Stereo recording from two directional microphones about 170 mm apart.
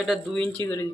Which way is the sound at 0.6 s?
15° left (ahead or behind).